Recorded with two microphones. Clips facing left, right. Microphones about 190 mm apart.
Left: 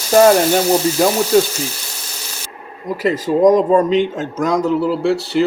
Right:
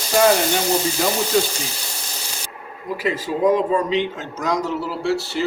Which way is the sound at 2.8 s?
40° left (ahead or behind).